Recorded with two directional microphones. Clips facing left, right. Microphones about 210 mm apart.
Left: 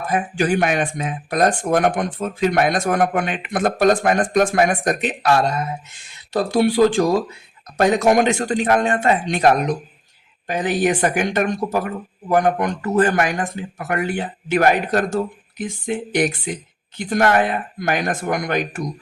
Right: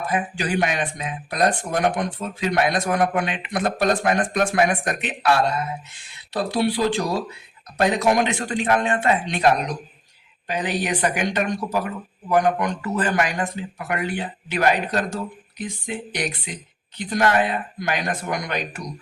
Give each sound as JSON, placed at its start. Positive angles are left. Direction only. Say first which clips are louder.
{"t": 0.1, "sound": "speech", "louder": "left 6 dB", "side_deg": 50}